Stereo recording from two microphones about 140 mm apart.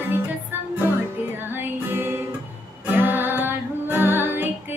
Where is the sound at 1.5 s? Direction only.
15° right (ahead or behind).